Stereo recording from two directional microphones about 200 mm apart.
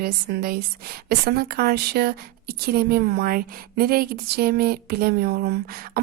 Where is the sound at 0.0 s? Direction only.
50° right (ahead or behind).